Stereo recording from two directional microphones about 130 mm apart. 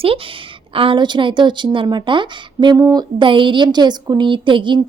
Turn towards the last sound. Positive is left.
turn(degrees=-40)  # may be behind; listen again after turning